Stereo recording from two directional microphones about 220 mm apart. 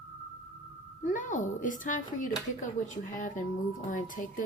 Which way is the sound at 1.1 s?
35° left (ahead or behind).